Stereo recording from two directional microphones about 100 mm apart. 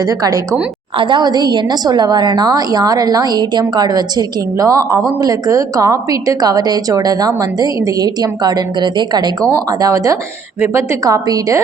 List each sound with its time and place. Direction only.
0.0 s a woman's voice: 35° right (ahead or behind)
0.9 s a woman's voice: 55° right (ahead or behind)
9.5 s a woman's voice: 35° right (ahead or behind)